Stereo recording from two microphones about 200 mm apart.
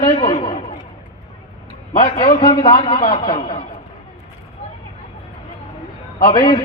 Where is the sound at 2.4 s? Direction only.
25° left (ahead or behind).